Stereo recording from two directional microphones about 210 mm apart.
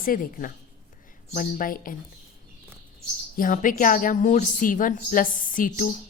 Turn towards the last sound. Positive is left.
turn(degrees=40)  # may be behind; listen again after turning